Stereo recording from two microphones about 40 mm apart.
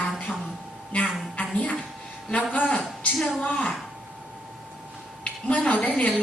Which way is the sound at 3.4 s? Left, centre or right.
Left.